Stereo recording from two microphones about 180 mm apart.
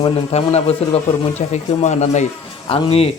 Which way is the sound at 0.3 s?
35° left (ahead or behind).